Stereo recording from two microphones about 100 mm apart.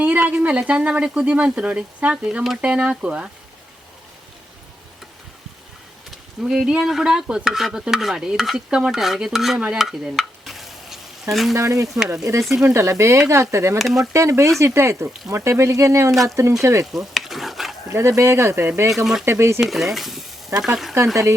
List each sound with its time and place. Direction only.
0.0 s speech: 15° right (ahead or behind)
6.1 s speech: 5° right (ahead or behind)
9.6 s stir: 5° right (ahead or behind)
11.5 s speech: 30° right (ahead or behind)
13.7 s speech: centre (ahead or behind)
14.0 s speech: 30° right (ahead or behind)
16.9 s stir: 5° right (ahead or behind)
17.8 s speech: 30° right (ahead or behind)
19.5 s speech: 5° right (ahead or behind)